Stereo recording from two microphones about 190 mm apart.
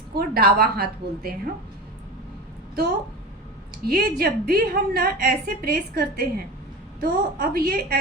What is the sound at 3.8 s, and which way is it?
A woman's voice, 55° right (ahead or behind).